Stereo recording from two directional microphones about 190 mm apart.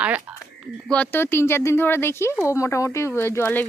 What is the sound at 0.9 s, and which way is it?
Speech, 10° left (ahead or behind).